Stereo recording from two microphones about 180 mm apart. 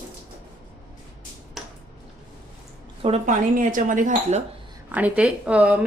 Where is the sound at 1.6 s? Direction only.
Centre (ahead or behind).